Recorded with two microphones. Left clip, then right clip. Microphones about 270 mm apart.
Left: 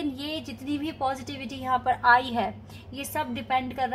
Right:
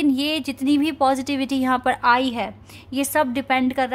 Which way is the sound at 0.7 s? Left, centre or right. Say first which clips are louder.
Right 10 dB; right.